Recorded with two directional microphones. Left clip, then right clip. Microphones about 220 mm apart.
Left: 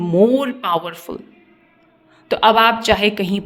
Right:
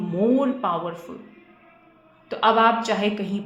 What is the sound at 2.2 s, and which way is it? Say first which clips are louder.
Speech: left 5 dB; 40° left (ahead or behind).